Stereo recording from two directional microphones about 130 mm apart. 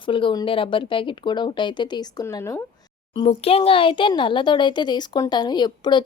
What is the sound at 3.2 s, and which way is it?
Speech, 50° left (ahead or behind).